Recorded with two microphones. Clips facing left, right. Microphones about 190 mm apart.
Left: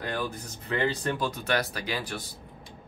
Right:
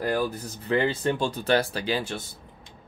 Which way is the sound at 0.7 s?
30° right (ahead or behind).